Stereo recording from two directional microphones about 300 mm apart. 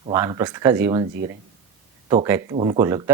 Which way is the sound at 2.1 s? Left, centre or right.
Centre.